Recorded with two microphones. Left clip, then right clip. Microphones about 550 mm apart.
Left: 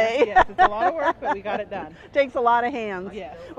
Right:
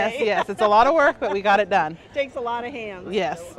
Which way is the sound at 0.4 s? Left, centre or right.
Left.